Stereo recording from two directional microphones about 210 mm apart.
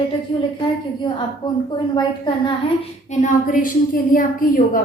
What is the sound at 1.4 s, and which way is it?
A woman's voice, 20° left (ahead or behind).